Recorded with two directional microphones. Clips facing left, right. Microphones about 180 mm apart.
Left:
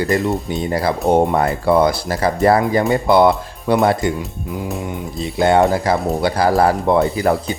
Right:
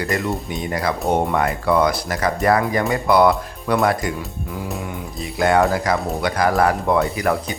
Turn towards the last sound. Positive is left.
turn(degrees=30)  # may be behind; listen again after turning